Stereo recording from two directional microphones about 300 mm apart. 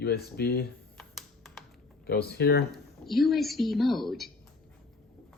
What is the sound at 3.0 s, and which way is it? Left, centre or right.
A woman's voice, centre.